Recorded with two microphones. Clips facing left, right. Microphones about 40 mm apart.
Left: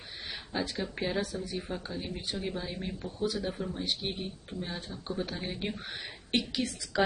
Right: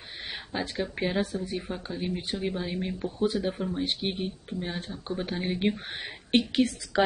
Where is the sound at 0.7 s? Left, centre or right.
Right.